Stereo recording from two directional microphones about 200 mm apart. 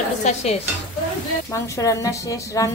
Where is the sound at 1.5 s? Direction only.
15° left (ahead or behind).